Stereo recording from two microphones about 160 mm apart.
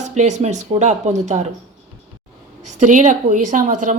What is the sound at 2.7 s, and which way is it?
Speech, 50° right (ahead or behind).